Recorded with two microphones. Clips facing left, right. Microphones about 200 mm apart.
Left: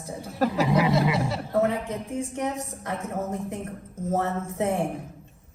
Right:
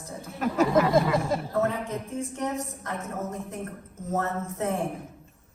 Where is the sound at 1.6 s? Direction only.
15° left (ahead or behind).